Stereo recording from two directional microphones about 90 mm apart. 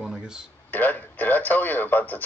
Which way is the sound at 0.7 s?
20° left (ahead or behind).